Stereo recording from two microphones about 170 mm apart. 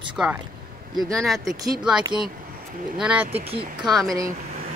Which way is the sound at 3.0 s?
10° right (ahead or behind).